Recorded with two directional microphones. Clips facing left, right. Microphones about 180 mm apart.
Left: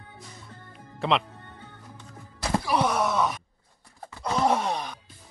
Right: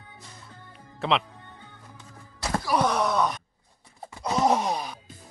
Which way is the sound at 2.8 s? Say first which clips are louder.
Right 3 dB; 5° left (ahead or behind).